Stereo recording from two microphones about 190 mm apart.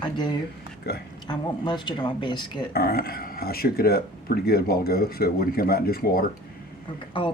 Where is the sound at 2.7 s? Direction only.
55° left (ahead or behind).